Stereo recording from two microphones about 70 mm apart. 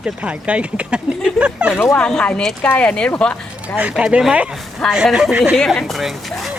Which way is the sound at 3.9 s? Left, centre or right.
Centre.